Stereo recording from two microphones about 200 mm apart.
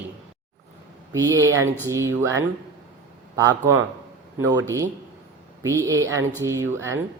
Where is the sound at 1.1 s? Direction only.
15° right (ahead or behind).